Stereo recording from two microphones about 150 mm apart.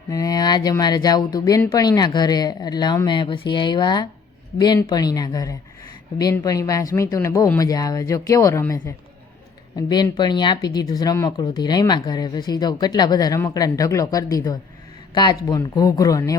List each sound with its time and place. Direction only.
0.1 s speech: 25° left (ahead or behind)